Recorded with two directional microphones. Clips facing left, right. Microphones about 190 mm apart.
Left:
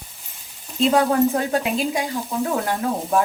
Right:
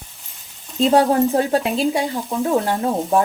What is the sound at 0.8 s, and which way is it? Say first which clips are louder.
Speech: right 2 dB; 35° right (ahead or behind).